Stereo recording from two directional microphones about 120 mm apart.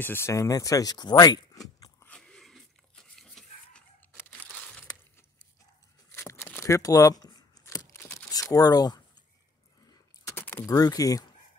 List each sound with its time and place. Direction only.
0.0 s speech: 20° left (ahead or behind)
2.0 s a sound: 5° left (ahead or behind)
4.2 s crumpling: 15° left (ahead or behind)
6.1 s tearing: 20° left (ahead or behind)
8.3 s speech: 30° left (ahead or behind)
10.2 s typing: 15° left (ahead or behind)
10.7 s speech: 30° left (ahead or behind)